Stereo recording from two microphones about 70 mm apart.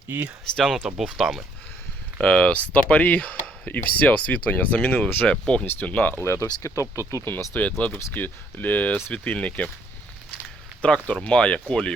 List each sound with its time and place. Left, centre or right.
0.5 s speech: centre
2.1 s speech: centre; by 5.3 s left
5.3 s speech: centre
6.2 s speech: left
7.3 s speech: left
10.8 s speech: centre